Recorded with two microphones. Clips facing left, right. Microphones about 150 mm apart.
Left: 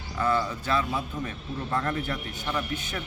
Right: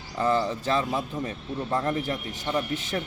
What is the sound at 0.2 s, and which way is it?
Speech, 30° right (ahead or behind).